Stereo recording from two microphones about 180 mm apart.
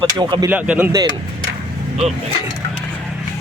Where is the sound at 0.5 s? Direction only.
5° right (ahead or behind).